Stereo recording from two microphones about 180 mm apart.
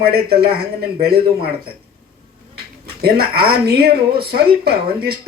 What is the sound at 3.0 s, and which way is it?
Speech, 60° right (ahead or behind).